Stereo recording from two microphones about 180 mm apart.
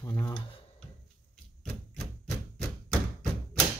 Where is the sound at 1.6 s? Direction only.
5° left (ahead or behind).